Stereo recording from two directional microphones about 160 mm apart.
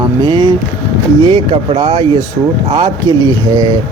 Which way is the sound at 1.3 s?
35° right (ahead or behind).